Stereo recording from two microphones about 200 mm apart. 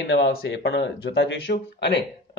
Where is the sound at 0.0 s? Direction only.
55° left (ahead or behind).